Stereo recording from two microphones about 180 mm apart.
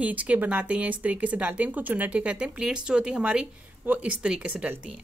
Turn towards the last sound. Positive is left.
turn(degrees=-5)  # may be behind; listen again after turning